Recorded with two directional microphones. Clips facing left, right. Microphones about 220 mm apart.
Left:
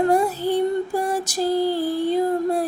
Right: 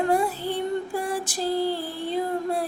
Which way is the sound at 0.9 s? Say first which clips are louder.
Left 4 dB; 40° left (ahead or behind).